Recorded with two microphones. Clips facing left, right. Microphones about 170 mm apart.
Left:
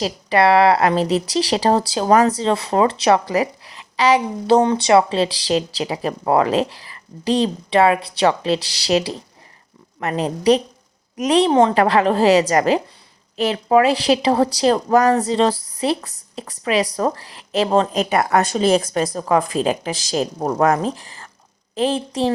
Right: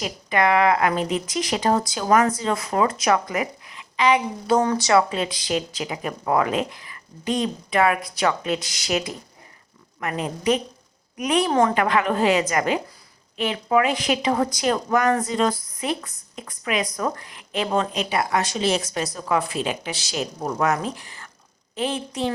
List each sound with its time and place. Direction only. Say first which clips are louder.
0.0 s a woman's voice: left 5 dB; 35° left (ahead or behind)
18.2 s speech: left 5 dB; 60° left (ahead or behind)
18.9 s a woman's voice: left 6 dB; 40° left (ahead or behind)